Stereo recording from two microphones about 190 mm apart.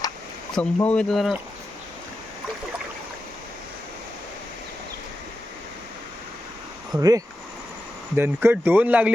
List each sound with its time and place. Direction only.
0.5 s speech: 5° left (ahead or behind)
6.9 s speech: 20° right (ahead or behind)